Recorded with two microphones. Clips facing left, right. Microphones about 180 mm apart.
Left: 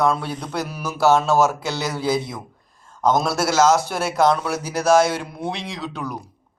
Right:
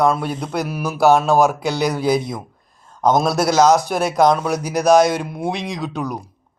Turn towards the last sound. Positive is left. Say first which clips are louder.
# right 4 dB
turn(degrees=-15)  # may be behind; listen again after turning